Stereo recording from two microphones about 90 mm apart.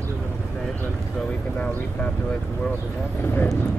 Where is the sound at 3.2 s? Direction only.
25° left (ahead or behind).